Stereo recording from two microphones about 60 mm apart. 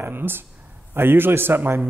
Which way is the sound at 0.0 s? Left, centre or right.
Right.